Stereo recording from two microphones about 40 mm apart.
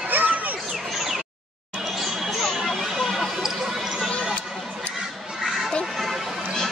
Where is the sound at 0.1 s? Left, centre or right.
Right.